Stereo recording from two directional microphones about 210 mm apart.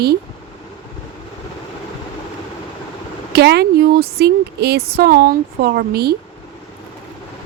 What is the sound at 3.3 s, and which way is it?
Speech, 50° right (ahead or behind).